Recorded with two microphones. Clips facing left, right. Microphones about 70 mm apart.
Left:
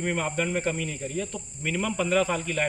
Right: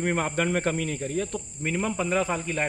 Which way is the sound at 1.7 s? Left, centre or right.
Right.